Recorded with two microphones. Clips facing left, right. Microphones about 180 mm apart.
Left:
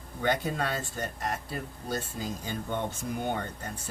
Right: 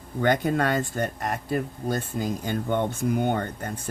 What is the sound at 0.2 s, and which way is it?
Speech, 60° right (ahead or behind).